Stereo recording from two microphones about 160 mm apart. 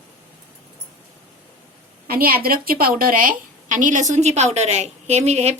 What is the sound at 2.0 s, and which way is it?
A woman's voice, 65° right (ahead or behind).